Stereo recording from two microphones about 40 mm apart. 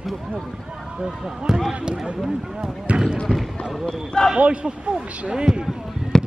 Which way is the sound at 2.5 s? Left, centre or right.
Right.